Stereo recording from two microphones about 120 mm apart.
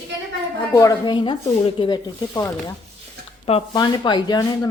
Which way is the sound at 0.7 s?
25° left (ahead or behind).